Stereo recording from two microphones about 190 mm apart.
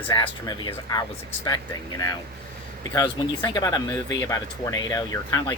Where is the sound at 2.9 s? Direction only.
20° left (ahead or behind).